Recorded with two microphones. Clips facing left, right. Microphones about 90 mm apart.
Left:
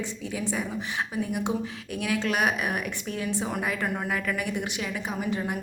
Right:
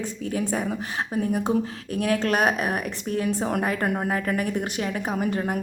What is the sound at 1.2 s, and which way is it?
Speech, 40° right (ahead or behind).